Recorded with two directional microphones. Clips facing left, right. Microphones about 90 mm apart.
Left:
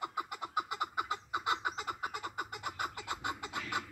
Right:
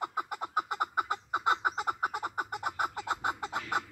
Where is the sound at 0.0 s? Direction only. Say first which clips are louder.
Right 4 dB; 40° right (ahead or behind).